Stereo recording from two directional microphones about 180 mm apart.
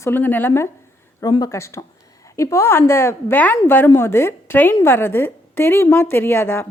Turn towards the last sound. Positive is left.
turn(degrees=15)  # may be behind; listen again after turning